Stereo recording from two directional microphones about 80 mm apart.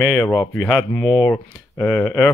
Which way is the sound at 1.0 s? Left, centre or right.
Left.